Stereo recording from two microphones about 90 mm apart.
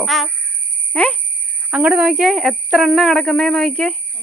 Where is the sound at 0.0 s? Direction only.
Centre (ahead or behind).